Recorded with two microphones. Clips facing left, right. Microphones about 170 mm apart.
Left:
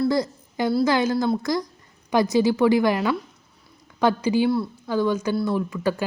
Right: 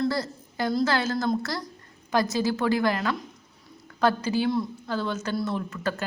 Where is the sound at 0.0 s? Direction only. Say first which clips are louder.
Left 5 dB; 15° left (ahead or behind).